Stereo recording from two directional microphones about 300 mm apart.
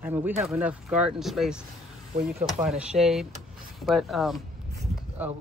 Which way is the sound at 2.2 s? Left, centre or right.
Right.